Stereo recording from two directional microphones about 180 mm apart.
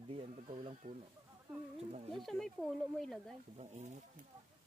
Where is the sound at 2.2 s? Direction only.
Centre (ahead or behind).